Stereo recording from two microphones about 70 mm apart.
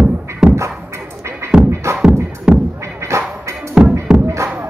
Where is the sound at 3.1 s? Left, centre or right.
Right.